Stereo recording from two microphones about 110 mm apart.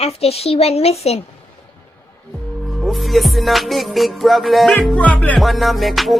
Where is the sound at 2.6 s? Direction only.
Centre (ahead or behind).